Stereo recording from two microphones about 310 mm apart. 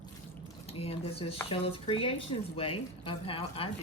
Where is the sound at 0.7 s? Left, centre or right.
Centre.